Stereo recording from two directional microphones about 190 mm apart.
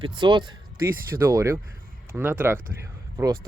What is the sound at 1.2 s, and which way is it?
Speech, 15° right (ahead or behind).